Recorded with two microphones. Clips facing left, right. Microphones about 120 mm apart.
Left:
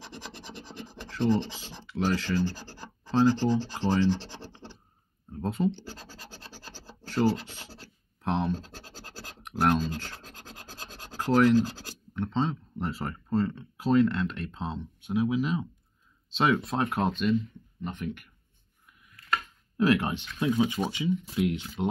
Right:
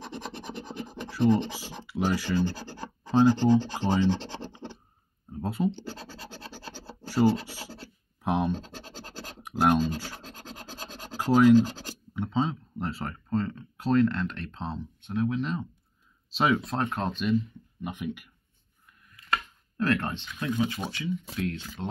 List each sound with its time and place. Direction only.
1.0 s scratch: 10° right (ahead or behind)
3.1 s rub: 15° right (ahead or behind)
4.5 s scratch: 20° right (ahead or behind)
5.3 s speech: 5° right (ahead or behind)
7.0 s scratch: 10° right (ahead or behind)
12.1 s speech: 5° right (ahead or behind)
17.8 s rub: 10° right (ahead or behind)
19.8 s speech: 10° left (ahead or behind)